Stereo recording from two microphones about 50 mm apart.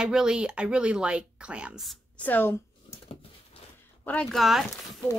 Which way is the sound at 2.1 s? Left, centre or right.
Left.